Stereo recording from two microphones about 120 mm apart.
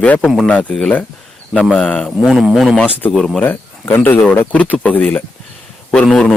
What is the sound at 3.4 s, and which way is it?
Speech, 15° left (ahead or behind).